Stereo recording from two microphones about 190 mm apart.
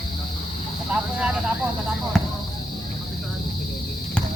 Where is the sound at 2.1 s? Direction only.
Centre (ahead or behind).